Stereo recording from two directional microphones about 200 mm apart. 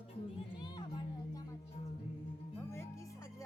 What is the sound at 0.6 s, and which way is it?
Children playing, 20° left (ahead or behind).